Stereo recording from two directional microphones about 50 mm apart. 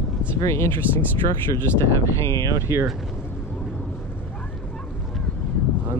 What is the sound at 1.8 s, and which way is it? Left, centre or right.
Speech, left.